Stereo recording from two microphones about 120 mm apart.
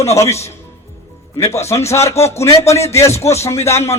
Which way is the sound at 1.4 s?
25° left (ahead or behind).